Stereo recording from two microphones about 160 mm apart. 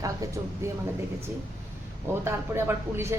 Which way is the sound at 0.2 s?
20° right (ahead or behind).